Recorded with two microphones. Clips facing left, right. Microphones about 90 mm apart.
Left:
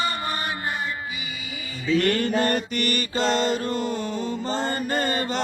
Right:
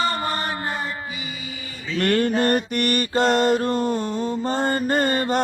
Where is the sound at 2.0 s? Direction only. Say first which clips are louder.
Right 4 dB; 50° right (ahead or behind).